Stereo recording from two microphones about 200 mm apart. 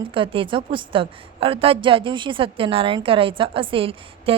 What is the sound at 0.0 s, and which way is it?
A woman's voice, 25° right (ahead or behind).